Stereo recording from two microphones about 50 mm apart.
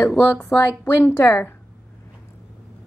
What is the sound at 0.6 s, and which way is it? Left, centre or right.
Speech, left.